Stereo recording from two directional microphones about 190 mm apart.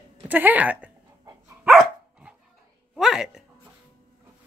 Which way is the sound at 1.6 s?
5° right (ahead or behind).